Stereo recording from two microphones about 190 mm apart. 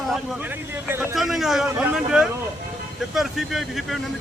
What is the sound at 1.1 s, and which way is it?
Speech, centre (ahead or behind).